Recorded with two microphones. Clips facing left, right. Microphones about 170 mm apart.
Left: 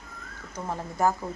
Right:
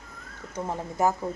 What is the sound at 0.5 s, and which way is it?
Speech, 20° right (ahead or behind).